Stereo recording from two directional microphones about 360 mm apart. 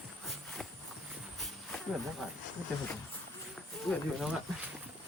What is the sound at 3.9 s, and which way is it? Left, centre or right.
Speech, centre.